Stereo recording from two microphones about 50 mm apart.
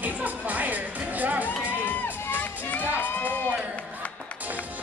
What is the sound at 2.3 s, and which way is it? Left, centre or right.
Music, left.